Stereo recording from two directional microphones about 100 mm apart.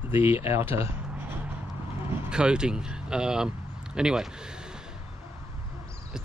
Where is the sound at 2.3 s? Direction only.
10° right (ahead or behind).